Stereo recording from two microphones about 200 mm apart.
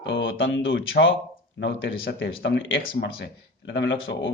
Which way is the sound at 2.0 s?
55° left (ahead or behind).